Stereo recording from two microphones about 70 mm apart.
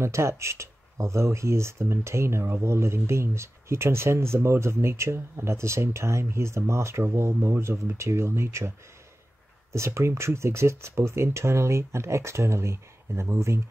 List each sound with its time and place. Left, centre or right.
0.0 s speech: right